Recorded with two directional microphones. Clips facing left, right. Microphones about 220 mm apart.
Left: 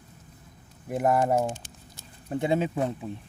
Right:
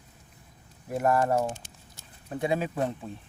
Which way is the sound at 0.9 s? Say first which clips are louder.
Left 1 dB; 15° left (ahead or behind).